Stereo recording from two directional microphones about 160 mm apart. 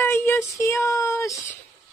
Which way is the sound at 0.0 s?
15° left (ahead or behind).